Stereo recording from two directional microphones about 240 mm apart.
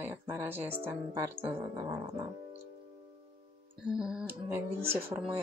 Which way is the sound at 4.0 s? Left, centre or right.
Centre.